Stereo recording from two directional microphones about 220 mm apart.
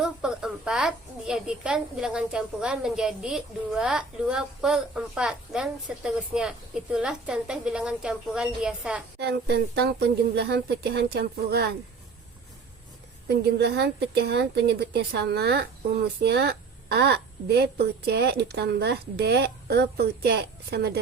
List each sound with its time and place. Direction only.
0.0 s a woman's voice: 5° right (ahead or behind)
9.1 s a woman's voice: 50° right (ahead or behind)
13.2 s a woman's voice: 50° right (ahead or behind)